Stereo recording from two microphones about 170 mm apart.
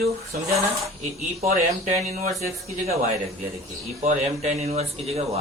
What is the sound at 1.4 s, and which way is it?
Speech, 45° right (ahead or behind).